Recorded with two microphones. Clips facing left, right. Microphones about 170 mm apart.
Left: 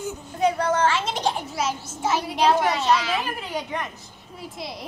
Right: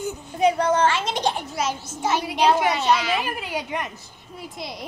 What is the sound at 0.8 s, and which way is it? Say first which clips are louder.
A child's voice: right 1 dB; 5° left (ahead or behind).